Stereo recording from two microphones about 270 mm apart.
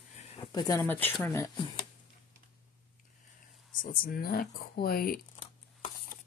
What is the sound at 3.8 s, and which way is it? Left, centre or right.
Speech, left.